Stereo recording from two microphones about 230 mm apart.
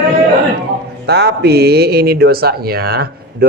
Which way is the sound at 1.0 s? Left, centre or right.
Right.